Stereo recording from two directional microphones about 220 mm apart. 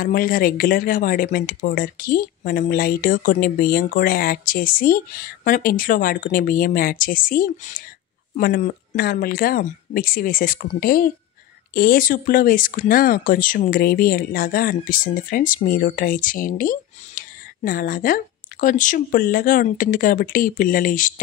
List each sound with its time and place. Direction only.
0.0 s speech: 40° left (ahead or behind)